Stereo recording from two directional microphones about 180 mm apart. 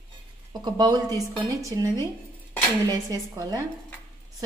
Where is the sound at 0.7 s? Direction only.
20° right (ahead or behind).